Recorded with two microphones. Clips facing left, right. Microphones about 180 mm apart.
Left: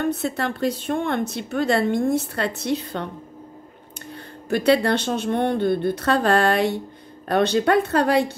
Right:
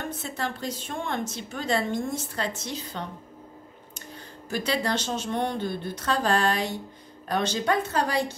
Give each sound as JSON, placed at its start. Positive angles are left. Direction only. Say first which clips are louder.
{"t": 0.0, "sound": "speech", "louder": "left 9 dB", "side_deg": 65}
{"t": 4.1, "sound": "speech", "louder": "left 8 dB", "side_deg": 60}